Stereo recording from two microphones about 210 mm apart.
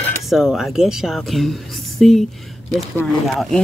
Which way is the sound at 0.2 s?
Centre (ahead or behind).